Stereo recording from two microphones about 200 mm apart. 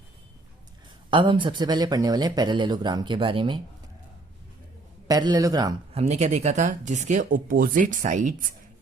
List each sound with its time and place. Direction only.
1.1 s speech: 25° right (ahead or behind)
5.0 s speech: 20° right (ahead or behind)
5.9 s speech: 35° right (ahead or behind)